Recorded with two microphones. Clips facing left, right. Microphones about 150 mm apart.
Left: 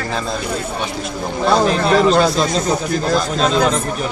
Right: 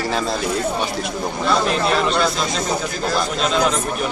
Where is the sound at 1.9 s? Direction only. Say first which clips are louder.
Left 6 dB; 40° left (ahead or behind).